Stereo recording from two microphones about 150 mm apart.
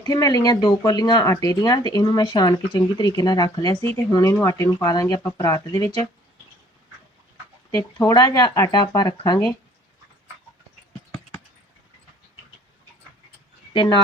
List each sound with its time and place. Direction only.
0.1 s speech: 25° left (ahead or behind)
7.7 s speech: 20° left (ahead or behind)
13.7 s speech: 30° left (ahead or behind)